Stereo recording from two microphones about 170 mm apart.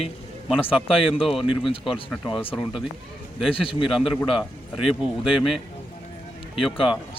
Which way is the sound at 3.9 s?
Centre (ahead or behind).